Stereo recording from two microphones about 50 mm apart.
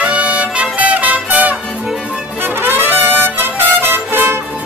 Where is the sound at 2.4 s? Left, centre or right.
Right.